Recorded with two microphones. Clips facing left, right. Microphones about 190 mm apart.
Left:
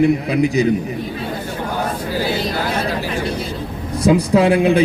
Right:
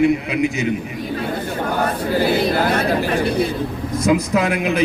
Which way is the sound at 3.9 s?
30° left (ahead or behind).